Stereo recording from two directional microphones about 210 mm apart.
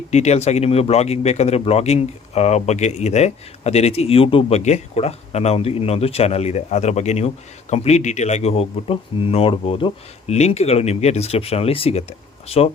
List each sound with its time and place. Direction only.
0.1 s speech: 30° left (ahead or behind)